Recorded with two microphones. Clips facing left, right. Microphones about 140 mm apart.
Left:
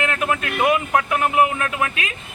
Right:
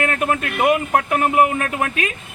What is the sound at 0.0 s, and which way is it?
A man's voice, 40° right (ahead or behind).